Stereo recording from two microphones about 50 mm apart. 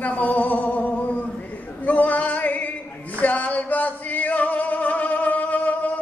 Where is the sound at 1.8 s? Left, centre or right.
Left.